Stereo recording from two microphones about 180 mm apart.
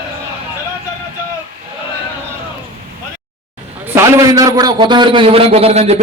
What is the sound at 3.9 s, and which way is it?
A man's voice, 15° right (ahead or behind).